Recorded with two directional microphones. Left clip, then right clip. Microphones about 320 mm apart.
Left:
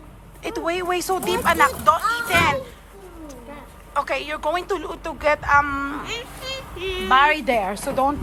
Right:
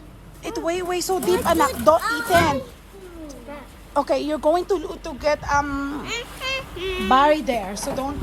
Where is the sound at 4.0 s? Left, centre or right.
Centre.